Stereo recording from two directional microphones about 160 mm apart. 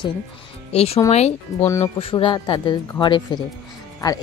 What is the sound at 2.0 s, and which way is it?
Speech, 35° left (ahead or behind).